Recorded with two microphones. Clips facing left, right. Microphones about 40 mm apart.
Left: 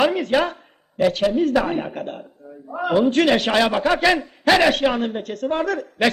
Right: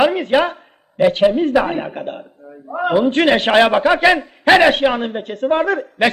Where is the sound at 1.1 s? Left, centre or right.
Right.